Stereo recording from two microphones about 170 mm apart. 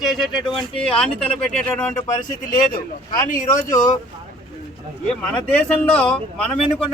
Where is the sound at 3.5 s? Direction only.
50° left (ahead or behind).